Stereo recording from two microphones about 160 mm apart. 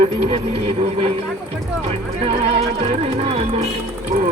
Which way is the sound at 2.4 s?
35° right (ahead or behind).